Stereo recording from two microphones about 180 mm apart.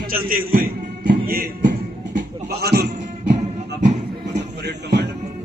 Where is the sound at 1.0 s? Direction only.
50° right (ahead or behind).